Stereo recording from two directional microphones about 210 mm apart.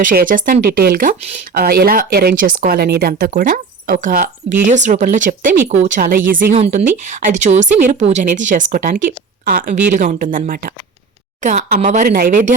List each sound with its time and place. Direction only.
0.0 s speech: 40° right (ahead or behind)